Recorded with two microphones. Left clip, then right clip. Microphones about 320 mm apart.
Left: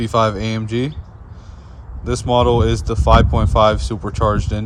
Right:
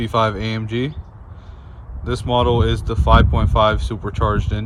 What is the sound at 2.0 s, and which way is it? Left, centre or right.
Speech, centre.